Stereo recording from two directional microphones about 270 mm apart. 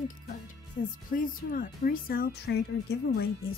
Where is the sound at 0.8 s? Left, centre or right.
Left.